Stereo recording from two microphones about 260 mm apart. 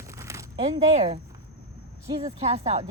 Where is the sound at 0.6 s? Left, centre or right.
Right.